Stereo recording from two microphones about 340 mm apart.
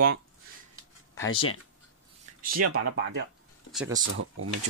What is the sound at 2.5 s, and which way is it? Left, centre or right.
Speech, right.